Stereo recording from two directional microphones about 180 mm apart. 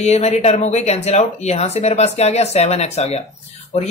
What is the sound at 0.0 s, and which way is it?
A woman's voice, 35° left (ahead or behind).